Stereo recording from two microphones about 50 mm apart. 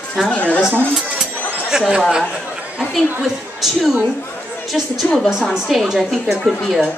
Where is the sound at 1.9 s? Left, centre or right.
Centre.